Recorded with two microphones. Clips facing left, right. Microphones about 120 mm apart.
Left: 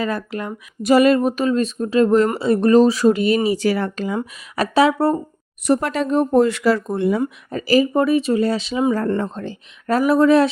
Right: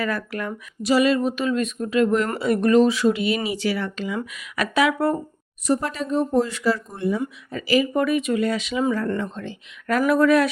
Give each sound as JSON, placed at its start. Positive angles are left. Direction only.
{"t": 0.0, "sound": "speech", "side_deg": 25}
{"t": 0.8, "sound": "speech", "side_deg": 50}
{"t": 4.2, "sound": "speech", "side_deg": 30}
{"t": 5.6, "sound": "speech", "side_deg": 65}
{"t": 7.2, "sound": "speech", "side_deg": 40}